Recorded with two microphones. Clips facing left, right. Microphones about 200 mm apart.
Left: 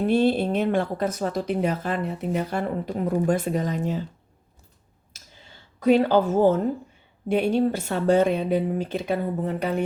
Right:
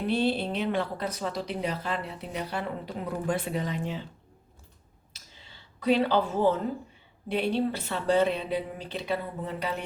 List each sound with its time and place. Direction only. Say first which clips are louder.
0.0 s a woman's voice: left 6 dB; 50° left (ahead or behind)
5.1 s a sound: left 4 dB; 45° left (ahead or behind)
7.3 s a woman's voice: left 6 dB; 45° left (ahead or behind)